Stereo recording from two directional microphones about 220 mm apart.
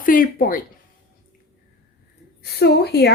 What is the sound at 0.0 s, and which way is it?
Speech, 40° left (ahead or behind).